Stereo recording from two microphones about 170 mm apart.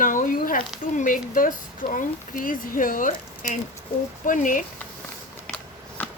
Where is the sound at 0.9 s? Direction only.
50° left (ahead or behind).